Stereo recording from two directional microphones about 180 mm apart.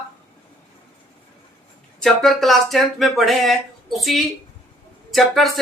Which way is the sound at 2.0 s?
Centre (ahead or behind).